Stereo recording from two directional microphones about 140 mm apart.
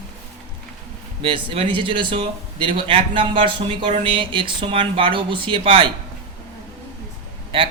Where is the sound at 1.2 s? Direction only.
40° right (ahead or behind).